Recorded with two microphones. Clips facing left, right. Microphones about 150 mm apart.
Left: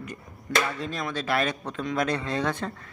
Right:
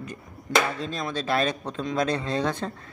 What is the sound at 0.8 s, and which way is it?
Speech, 30° right (ahead or behind).